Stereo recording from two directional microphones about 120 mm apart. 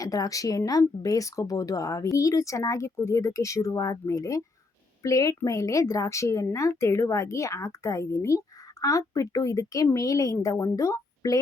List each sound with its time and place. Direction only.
0.0 s speech: 30° left (ahead or behind)